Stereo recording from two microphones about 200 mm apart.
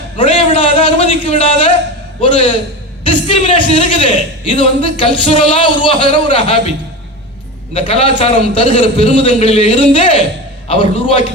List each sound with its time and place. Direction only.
0.2 s a sound: 25° left (ahead or behind)
2.2 s a man's voice: 25° left (ahead or behind)
7.7 s a man's voice: 25° left (ahead or behind)